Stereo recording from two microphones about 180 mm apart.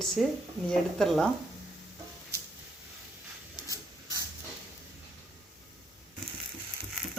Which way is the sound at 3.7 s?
20° right (ahead or behind).